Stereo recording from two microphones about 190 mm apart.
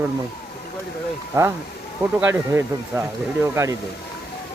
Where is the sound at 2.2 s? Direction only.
10° right (ahead or behind).